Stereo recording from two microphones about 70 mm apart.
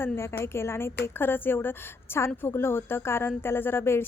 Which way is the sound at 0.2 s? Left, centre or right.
Left.